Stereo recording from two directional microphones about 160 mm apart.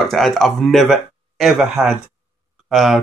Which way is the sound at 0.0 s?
Centre (ahead or behind).